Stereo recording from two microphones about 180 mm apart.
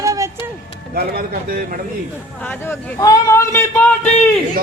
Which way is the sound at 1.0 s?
55° right (ahead or behind).